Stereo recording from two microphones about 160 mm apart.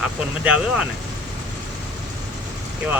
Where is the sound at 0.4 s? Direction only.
5° right (ahead or behind).